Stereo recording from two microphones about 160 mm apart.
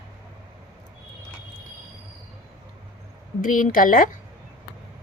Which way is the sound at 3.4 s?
55° left (ahead or behind).